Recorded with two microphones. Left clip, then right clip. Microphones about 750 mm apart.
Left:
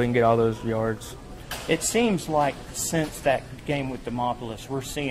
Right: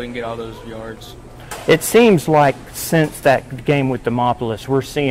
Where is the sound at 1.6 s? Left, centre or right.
Right.